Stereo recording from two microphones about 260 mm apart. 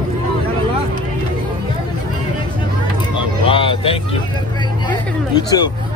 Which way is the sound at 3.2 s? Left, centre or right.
Centre.